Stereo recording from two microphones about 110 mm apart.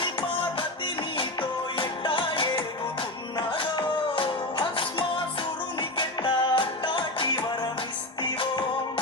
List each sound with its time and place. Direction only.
0.0 s music: 50° left (ahead or behind)